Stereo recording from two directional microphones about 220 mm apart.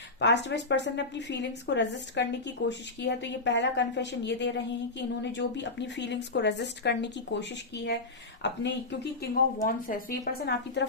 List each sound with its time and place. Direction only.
0.2 s speech: 50° left (ahead or behind)
9.6 s a woman's voice: 40° left (ahead or behind)